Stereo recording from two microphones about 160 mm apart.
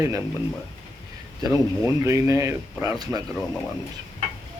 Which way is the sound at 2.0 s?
20° right (ahead or behind).